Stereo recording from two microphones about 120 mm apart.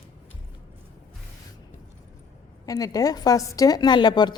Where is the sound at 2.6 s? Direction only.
30° left (ahead or behind).